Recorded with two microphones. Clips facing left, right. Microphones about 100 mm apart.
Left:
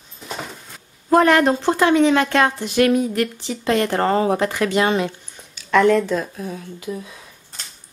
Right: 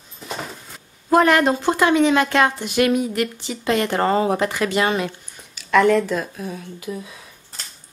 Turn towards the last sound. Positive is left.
turn(degrees=0)  # may be behind; listen again after turning